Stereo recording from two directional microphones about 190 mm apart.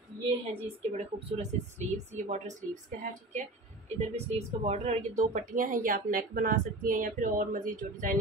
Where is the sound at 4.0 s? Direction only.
35° right (ahead or behind).